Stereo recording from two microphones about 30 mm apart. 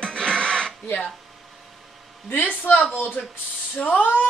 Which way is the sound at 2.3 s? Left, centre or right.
Left.